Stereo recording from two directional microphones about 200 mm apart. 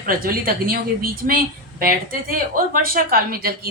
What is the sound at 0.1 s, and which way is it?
Speech, 45° right (ahead or behind).